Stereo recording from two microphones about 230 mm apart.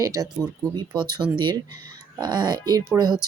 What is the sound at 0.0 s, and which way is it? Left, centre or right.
Speech, centre.